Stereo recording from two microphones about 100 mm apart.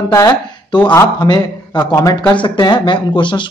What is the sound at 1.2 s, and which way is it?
A man's voice, 45° left (ahead or behind).